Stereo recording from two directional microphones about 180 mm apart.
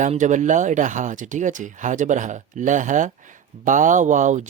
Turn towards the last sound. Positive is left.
turn(degrees=-45)  # may be behind; listen again after turning